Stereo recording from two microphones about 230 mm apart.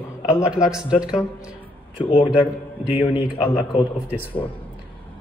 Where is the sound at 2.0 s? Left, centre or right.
Left.